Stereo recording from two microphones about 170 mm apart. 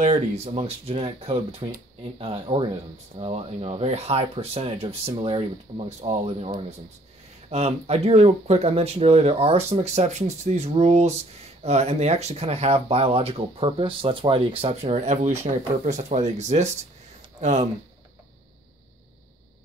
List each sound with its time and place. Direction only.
0.0 s speech: 40° right (ahead or behind)